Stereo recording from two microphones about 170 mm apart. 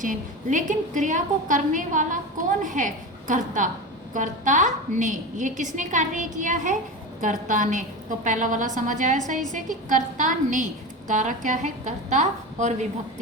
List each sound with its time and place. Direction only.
0.0 s a woman's voice: 50° right (ahead or behind)